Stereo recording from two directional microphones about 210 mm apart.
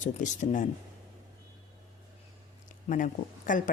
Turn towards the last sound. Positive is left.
turn(degrees=40)  # may be behind; listen again after turning